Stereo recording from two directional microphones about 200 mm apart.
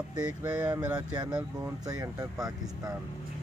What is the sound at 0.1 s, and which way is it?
Speech, 10° right (ahead or behind).